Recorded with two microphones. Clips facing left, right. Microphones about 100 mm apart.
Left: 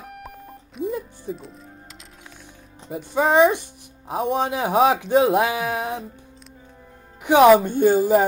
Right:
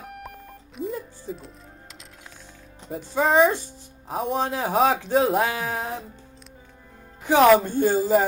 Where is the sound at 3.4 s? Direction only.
15° left (ahead or behind).